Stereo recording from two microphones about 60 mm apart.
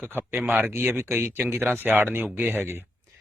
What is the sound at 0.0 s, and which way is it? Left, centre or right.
Speech, right.